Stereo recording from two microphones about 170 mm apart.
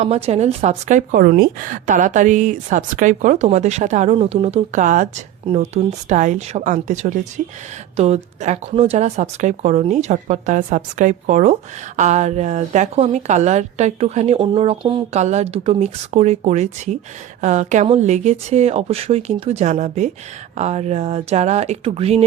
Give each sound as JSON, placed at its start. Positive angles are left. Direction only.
{"t": 0.0, "sound": "speech", "side_deg": -40}